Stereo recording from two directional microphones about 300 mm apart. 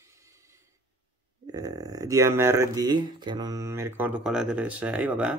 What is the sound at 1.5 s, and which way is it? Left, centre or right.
Speech, centre.